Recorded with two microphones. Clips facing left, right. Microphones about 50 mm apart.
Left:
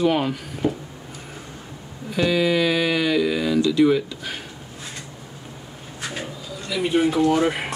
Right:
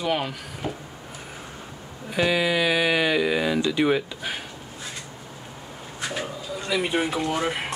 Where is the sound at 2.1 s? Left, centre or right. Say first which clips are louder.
Left 2 dB; centre.